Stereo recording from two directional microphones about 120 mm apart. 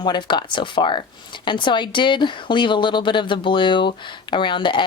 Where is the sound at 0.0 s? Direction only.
40° left (ahead or behind).